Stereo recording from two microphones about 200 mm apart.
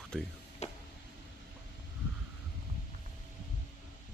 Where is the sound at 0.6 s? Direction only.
35° left (ahead or behind).